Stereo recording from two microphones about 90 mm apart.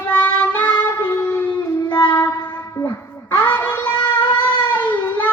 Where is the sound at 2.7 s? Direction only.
35° left (ahead or behind).